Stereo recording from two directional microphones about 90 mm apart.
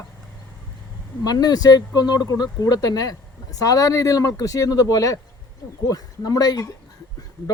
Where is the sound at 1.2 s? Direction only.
45° left (ahead or behind).